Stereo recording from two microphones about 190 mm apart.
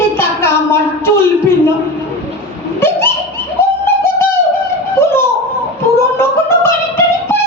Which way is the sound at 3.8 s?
10° left (ahead or behind).